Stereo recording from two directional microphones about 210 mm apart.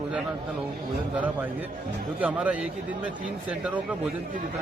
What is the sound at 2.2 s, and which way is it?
Speech, 5° right (ahead or behind).